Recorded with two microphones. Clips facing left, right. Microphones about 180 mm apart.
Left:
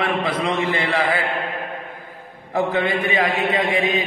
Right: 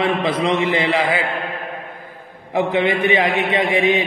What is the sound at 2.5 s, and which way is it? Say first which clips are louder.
A man's voice: right 3 dB; 20° right (ahead or behind).